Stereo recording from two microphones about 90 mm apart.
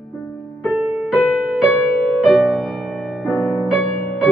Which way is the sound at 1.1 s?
5° left (ahead or behind).